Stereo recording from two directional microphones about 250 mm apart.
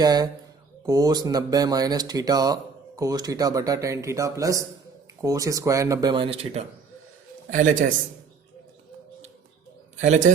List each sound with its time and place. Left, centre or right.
0.0 s a man's voice: centre; by 7.9 s right